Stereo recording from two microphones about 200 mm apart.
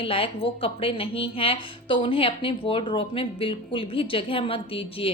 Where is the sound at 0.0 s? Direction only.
30° left (ahead or behind).